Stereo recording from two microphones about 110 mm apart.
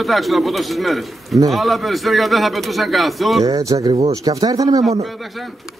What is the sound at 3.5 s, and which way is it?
Speech, 30° right (ahead or behind).